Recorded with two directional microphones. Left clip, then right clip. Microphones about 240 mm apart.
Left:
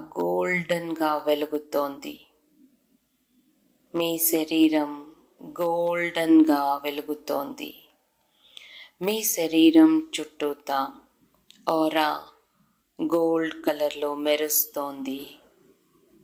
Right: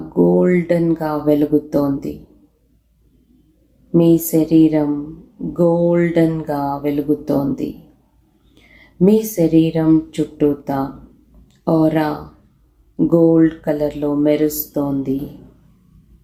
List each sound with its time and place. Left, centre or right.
0.1 s speech: left
3.9 s speech: left
8.5 s a sound: left
9.3 s speech: left